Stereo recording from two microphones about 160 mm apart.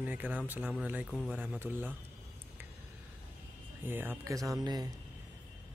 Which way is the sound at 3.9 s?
15° right (ahead or behind).